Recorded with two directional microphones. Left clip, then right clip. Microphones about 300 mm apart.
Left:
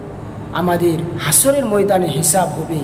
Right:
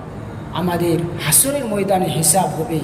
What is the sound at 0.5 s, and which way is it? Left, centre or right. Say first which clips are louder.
A man's voice: left 3 dB; centre.